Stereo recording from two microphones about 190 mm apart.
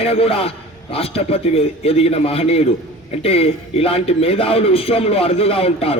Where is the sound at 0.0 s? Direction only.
30° left (ahead or behind).